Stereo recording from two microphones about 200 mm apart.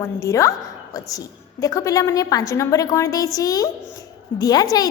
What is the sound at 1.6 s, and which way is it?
A woman's voice, 15° left (ahead or behind).